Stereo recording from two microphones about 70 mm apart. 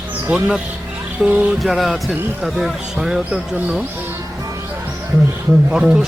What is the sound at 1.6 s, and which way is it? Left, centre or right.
Speech, centre.